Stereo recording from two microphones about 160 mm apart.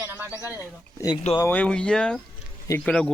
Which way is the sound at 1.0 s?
20° left (ahead or behind).